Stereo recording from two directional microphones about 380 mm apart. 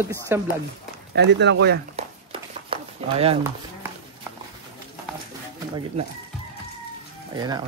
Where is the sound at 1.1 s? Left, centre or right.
Right.